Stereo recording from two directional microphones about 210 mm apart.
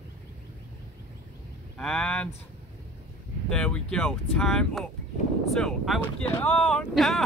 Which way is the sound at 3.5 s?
5° left (ahead or behind).